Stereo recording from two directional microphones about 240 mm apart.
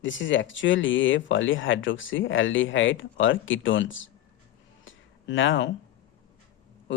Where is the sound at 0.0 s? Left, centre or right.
Left.